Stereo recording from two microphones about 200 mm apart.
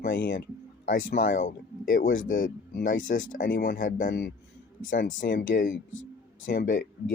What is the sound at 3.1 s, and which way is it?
Speech, 75° left (ahead or behind).